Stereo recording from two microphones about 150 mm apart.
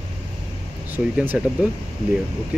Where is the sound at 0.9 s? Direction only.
10° right (ahead or behind).